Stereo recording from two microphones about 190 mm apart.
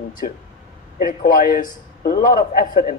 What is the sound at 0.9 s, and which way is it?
Speech, 45° left (ahead or behind).